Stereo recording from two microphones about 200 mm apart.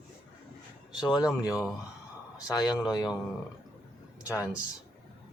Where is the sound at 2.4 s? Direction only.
20° left (ahead or behind).